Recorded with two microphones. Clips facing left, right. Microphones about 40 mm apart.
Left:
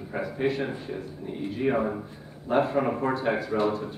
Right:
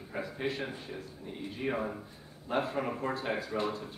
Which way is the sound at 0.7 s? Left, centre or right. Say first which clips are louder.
Left 8 dB; left.